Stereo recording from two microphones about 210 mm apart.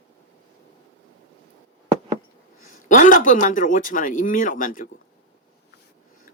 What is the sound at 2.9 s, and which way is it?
Speech, 40° left (ahead or behind).